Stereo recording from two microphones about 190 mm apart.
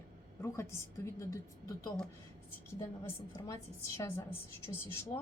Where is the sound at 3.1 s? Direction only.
15° left (ahead or behind).